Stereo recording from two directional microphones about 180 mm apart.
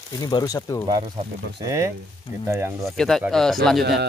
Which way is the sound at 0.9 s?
25° right (ahead or behind).